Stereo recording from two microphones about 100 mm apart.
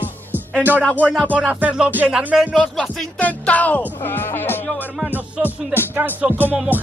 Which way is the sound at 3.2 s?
15° left (ahead or behind).